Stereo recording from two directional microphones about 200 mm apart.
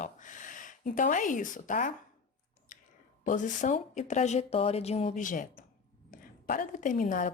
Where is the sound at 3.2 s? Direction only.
40° left (ahead or behind).